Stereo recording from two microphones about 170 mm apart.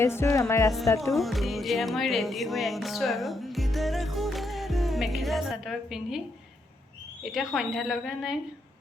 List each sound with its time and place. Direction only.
0.0 s music: 15° left (ahead or behind)
1.1 s music: centre (ahead or behind)
7.2 s speech: centre (ahead or behind)